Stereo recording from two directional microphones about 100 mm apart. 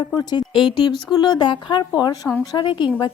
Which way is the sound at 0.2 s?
45° left (ahead or behind).